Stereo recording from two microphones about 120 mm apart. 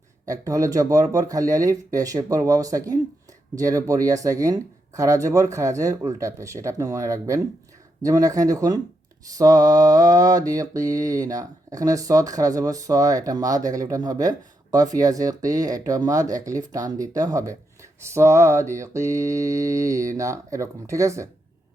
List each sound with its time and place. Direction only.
0.3 s mantra: 30° right (ahead or behind)